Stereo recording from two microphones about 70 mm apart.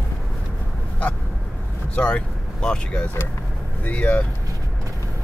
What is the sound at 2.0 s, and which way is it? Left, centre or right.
Speech, centre.